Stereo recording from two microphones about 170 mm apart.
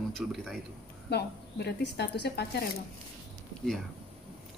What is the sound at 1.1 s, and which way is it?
A woman's voice, 75° left (ahead or behind).